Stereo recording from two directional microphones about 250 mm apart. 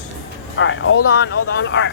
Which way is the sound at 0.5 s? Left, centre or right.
Left.